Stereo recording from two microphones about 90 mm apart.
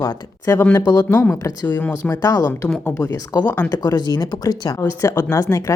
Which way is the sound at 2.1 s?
40° left (ahead or behind).